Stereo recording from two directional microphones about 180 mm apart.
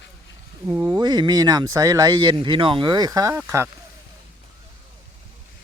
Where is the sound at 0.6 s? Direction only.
15° right (ahead or behind).